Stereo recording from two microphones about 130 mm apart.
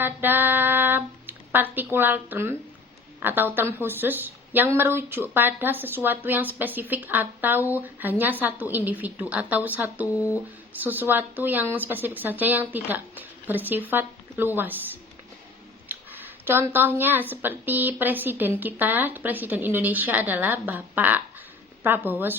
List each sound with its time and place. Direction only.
0.0 s a woman's voice: 15° right (ahead or behind)
10.1 s speech: 25° left (ahead or behind)
10.8 s a woman's voice: 15° right (ahead or behind)
15.9 s a sound: 15° right (ahead or behind)
17.4 s a woman's voice: 15° right (ahead or behind)